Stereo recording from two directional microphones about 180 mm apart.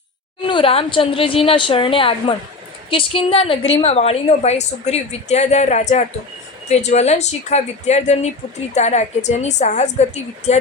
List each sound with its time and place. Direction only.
0.4 s a woman's voice: 30° left (ahead or behind)